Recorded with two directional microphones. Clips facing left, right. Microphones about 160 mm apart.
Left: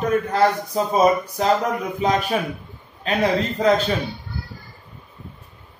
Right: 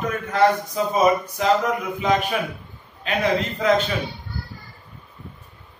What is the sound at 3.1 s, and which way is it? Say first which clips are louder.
Speech: left 2 dB; 30° left (ahead or behind).